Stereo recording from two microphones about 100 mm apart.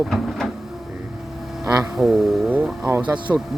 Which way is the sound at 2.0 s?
5° right (ahead or behind).